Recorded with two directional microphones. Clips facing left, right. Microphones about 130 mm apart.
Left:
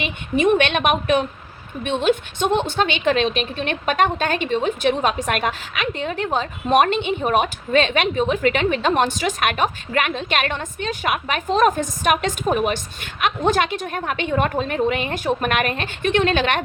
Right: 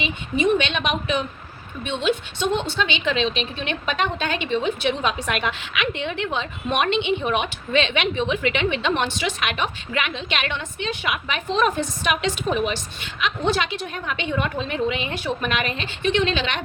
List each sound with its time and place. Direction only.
0.0 s a woman's voice: 55° left (ahead or behind)